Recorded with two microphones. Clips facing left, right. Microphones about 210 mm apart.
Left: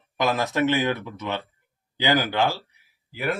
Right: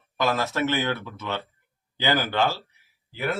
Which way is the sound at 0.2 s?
15° left (ahead or behind).